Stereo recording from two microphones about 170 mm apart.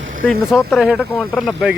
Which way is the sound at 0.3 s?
Centre (ahead or behind).